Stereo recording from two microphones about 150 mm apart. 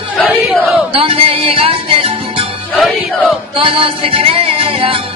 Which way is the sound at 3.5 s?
35° right (ahead or behind).